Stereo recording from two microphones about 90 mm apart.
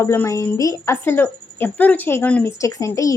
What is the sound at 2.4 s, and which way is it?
Speech, 35° left (ahead or behind).